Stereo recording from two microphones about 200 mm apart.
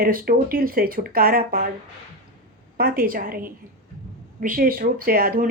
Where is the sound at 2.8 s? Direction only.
45° right (ahead or behind).